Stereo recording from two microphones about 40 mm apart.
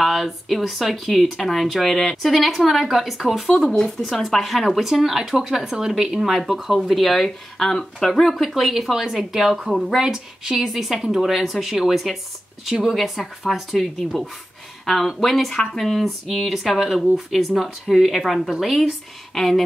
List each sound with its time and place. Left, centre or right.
0.0 s speech: centre
3.6 s speech: centre
4.0 s speech: centre
6.2 s speech: centre